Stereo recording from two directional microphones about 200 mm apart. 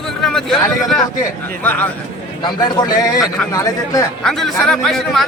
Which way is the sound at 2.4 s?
20° left (ahead or behind).